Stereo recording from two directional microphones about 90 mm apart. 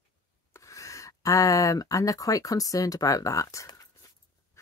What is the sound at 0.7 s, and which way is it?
Speech, 35° left (ahead or behind).